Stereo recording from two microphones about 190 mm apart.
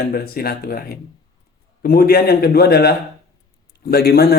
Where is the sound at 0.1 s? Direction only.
55° left (ahead or behind).